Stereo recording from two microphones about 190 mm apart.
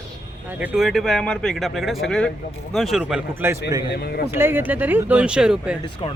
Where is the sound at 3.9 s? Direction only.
60° left (ahead or behind).